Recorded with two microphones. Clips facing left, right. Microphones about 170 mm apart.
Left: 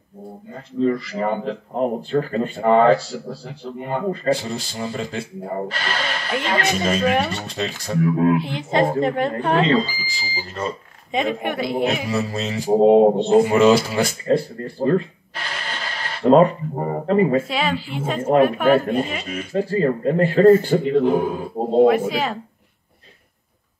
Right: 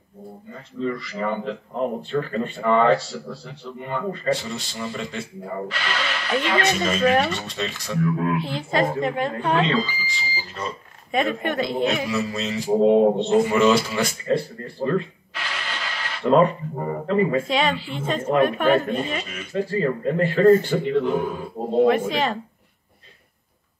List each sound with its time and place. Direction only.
0.5 s a man's voice: 40° left (ahead or behind)
7.0 s speech: 5° left (ahead or behind)
7.5 s a man's voice: 40° left (ahead or behind)
8.5 s a woman's voice: 20° left (ahead or behind)
9.0 s a man's voice: 40° left (ahead or behind)
11.1 s speech: 15° left (ahead or behind)
12.1 s a man's voice: 40° left (ahead or behind)
14.8 s a sound: 35° left (ahead or behind)
16.3 s a man's voice: 35° left (ahead or behind)
17.4 s speech: 5° left (ahead or behind)
19.2 s a man's voice: 35° left (ahead or behind)
21.8 s speech: 5° left (ahead or behind)